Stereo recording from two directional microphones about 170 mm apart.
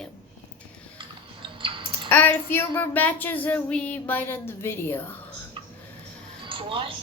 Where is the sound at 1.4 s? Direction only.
30° right (ahead or behind).